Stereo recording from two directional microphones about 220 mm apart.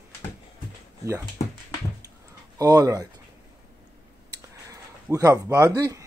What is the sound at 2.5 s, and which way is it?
Speech, 15° right (ahead or behind).